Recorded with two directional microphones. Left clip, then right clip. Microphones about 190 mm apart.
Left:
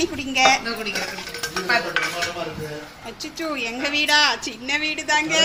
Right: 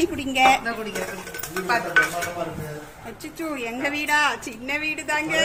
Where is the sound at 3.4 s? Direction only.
15° right (ahead or behind).